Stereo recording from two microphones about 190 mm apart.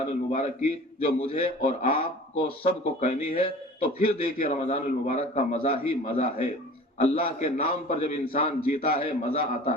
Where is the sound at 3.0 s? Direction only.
35° left (ahead or behind).